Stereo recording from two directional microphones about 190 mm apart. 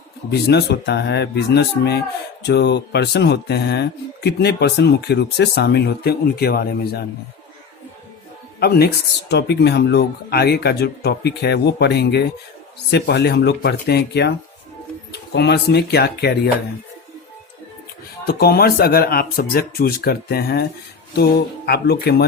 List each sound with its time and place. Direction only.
0.3 s speech: 60° left (ahead or behind)
8.6 s speech: 55° left (ahead or behind)
18.3 s speech: 55° left (ahead or behind)
21.7 s speech: 55° left (ahead or behind)